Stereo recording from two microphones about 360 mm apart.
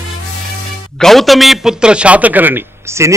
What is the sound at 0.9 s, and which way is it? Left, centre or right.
A man's voice, centre.